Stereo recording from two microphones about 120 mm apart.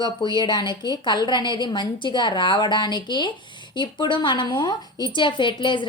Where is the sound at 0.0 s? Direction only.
40° left (ahead or behind).